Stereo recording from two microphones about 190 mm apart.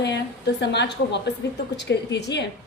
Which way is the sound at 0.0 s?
65° left (ahead or behind).